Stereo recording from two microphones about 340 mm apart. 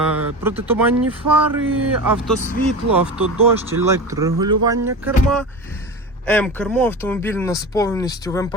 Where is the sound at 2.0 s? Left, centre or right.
Centre.